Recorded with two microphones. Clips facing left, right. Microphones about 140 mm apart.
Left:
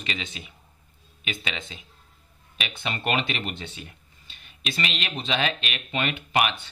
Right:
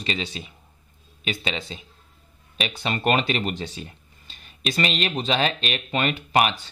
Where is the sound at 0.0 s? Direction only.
35° right (ahead or behind).